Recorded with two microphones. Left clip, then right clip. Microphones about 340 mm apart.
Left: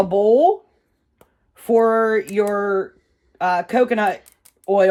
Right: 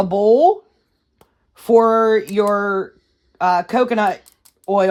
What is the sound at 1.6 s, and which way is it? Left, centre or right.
Speech, right.